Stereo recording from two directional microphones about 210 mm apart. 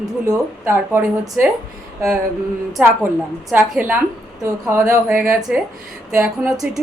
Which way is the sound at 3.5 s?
5° right (ahead or behind).